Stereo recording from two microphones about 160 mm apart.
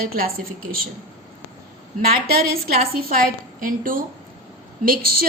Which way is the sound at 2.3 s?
70° right (ahead or behind).